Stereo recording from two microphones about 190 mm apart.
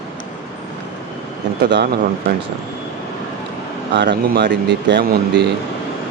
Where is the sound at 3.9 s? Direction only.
65° right (ahead or behind).